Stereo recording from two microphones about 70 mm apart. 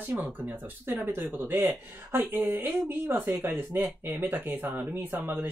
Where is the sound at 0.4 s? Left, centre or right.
Right.